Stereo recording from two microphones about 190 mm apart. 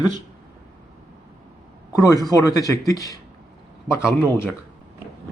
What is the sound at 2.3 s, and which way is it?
Speech, 15° left (ahead or behind).